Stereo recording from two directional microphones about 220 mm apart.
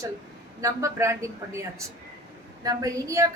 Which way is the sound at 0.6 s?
15° right (ahead or behind).